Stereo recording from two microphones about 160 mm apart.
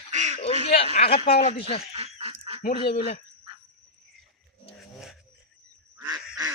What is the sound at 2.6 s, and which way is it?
Speech, 50° left (ahead or behind).